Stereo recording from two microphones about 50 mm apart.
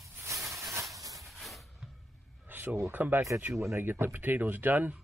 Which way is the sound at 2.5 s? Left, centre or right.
Right.